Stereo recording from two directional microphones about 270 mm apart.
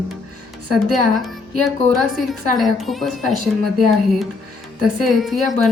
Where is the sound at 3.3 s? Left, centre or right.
Right.